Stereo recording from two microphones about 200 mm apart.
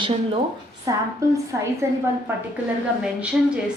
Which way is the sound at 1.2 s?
15° right (ahead or behind).